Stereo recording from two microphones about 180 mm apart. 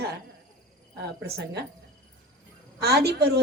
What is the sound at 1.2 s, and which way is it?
Speech, 65° right (ahead or behind).